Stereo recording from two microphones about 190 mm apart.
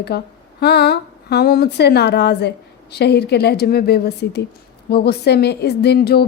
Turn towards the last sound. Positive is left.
turn(degrees=55)  # may be behind; listen again after turning